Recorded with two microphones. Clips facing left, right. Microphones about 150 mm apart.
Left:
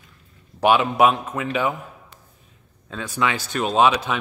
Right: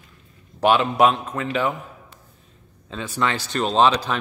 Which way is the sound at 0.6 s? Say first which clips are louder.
Even; 5° left (ahead or behind).